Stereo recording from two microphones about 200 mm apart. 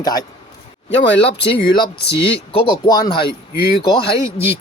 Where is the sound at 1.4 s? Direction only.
50° left (ahead or behind).